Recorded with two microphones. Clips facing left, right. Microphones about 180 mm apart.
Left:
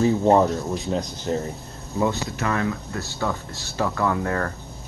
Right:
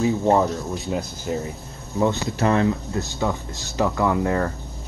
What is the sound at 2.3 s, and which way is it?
Speech, 30° right (ahead or behind).